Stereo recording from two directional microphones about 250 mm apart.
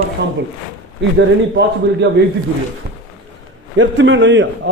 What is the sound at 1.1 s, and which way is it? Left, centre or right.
Speech, right.